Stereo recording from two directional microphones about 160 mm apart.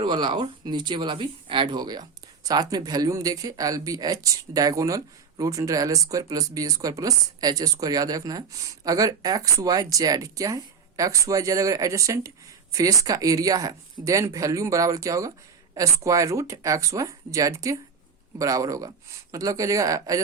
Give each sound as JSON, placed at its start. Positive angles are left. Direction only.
{"t": 0.0, "sound": "speech", "side_deg": -30}